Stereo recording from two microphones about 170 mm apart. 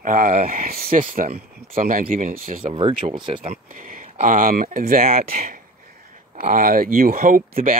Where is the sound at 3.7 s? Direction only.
55° right (ahead or behind).